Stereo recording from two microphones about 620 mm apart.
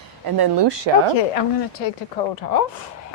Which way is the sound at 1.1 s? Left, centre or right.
Left.